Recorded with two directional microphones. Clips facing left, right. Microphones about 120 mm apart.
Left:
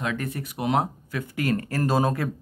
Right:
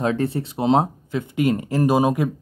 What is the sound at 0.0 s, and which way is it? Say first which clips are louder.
Speech: right 8 dB; 30° right (ahead or behind).